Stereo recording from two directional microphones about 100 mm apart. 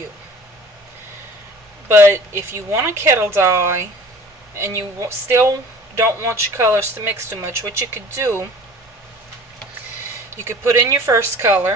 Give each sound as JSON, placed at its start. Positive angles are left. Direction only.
{"t": 1.9, "sound": "speech", "side_deg": -25}
{"t": 10.4, "sound": "speech", "side_deg": -30}